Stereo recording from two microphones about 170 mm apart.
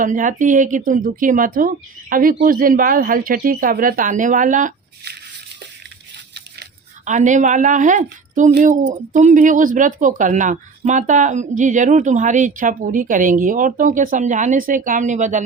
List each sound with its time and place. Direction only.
0.0 s speech: 50° right (ahead or behind)
7.0 s speech: 45° right (ahead or behind)